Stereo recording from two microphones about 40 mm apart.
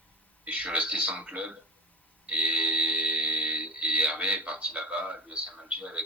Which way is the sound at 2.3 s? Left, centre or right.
Right.